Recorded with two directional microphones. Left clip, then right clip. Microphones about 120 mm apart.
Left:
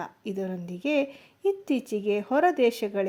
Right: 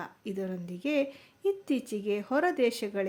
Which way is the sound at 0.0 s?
20° left (ahead or behind).